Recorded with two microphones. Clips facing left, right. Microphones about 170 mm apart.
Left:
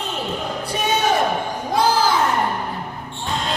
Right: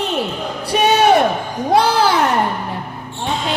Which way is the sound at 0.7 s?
70° right (ahead or behind).